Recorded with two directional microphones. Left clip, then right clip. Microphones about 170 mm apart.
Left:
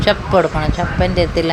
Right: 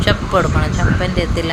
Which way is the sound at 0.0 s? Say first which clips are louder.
Left 2 dB; 10° left (ahead or behind).